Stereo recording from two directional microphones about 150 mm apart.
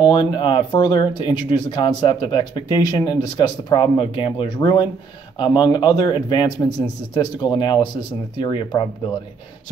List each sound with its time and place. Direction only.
0.0 s speech: 30° left (ahead or behind)